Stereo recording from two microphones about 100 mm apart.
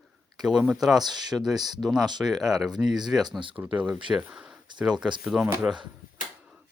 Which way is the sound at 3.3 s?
55° right (ahead or behind).